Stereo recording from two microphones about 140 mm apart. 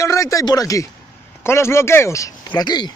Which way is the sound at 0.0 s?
25° left (ahead or behind).